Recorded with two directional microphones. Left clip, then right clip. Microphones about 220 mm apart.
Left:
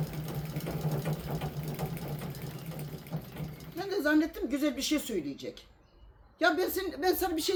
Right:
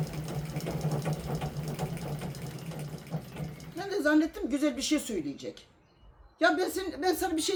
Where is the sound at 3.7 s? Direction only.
Centre (ahead or behind).